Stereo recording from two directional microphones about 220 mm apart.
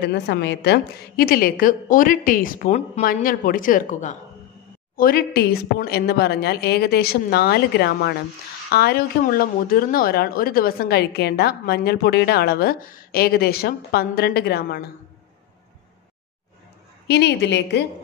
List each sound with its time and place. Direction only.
0.0 s a woman's voice: 50° left (ahead or behind)
17.1 s speech: 50° left (ahead or behind)